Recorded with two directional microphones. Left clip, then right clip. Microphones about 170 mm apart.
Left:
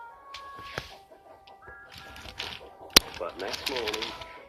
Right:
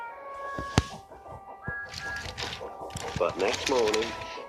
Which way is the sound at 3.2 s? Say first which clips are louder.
Right 8 dB; 50° right (ahead or behind).